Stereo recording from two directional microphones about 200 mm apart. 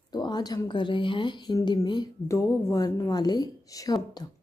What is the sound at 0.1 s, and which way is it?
A woman's voice, 20° left (ahead or behind).